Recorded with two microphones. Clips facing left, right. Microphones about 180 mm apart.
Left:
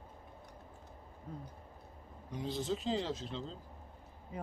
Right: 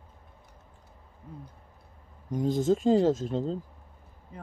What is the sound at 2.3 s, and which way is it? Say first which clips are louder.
Speech: right 12 dB; 45° right (ahead or behind).